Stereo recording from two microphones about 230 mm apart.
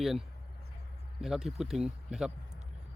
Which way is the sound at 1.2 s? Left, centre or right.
Centre.